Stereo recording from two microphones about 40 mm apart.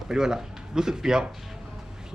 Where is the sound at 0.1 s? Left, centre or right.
Centre.